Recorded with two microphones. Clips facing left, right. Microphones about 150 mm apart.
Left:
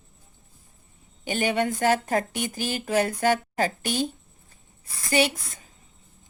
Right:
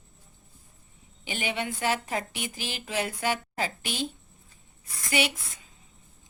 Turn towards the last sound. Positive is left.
turn(degrees=40)  # may be behind; listen again after turning